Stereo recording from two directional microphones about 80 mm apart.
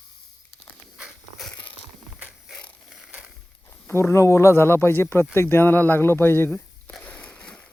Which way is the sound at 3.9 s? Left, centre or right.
Left.